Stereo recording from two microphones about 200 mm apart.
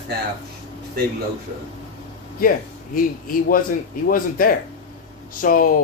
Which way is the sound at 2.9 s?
45° left (ahead or behind).